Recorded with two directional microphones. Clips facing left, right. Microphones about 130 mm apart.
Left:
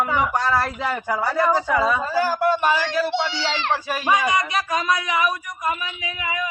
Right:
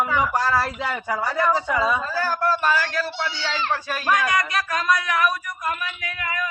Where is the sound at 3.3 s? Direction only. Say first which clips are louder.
Left 2 dB; 90° left.